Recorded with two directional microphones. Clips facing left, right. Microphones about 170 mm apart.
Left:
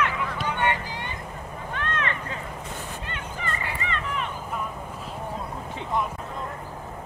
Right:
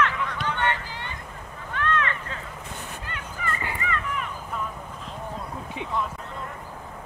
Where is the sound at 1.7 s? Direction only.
20° left (ahead or behind).